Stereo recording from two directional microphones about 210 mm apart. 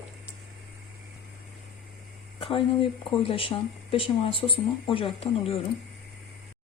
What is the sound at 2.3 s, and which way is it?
Speech, 25° left (ahead or behind).